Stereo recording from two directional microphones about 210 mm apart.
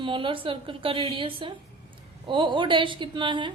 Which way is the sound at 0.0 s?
25° right (ahead or behind).